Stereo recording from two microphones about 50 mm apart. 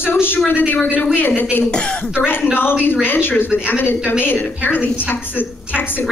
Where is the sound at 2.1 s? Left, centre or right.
Left.